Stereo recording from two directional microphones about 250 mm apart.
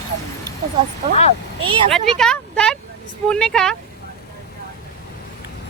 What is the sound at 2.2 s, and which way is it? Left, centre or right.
A woman's voice, centre.